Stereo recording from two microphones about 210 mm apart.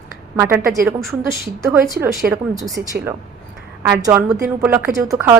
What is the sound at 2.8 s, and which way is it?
Speech, 50° right (ahead or behind).